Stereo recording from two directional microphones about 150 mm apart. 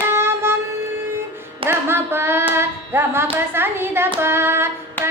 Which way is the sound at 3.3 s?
15° right (ahead or behind).